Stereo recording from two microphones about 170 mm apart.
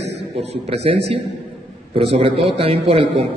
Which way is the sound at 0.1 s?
35° right (ahead or behind).